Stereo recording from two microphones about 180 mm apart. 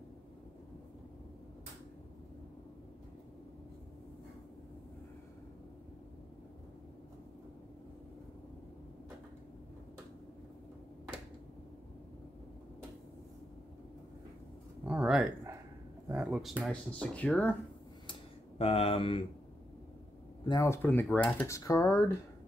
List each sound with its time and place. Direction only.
14.9 s a sound: 5° right (ahead or behind)
16.1 s speech: 5° right (ahead or behind)
18.6 s speech: 35° left (ahead or behind)
20.4 s speech: 20° left (ahead or behind)